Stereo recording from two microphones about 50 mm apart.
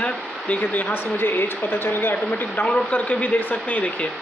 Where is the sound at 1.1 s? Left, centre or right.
Left.